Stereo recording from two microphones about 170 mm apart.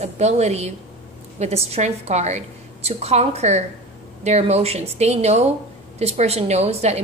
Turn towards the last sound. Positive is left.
turn(degrees=-40)  # may be behind; listen again after turning